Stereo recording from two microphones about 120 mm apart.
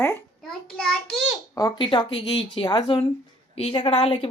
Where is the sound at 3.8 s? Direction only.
45° left (ahead or behind).